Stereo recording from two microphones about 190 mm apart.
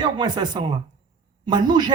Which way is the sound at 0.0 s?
20° right (ahead or behind).